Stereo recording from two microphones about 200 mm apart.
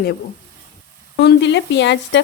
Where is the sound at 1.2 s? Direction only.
60° left (ahead or behind).